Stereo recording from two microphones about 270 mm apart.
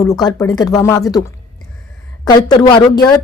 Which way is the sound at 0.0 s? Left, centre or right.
Centre.